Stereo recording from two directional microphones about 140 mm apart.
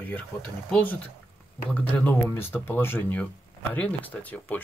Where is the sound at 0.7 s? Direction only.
5° left (ahead or behind).